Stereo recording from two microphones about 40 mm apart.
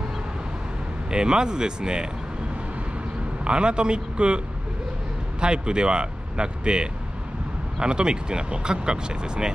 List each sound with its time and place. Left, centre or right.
1.1 s speech: centre
3.4 s speech: right
5.4 s speech: right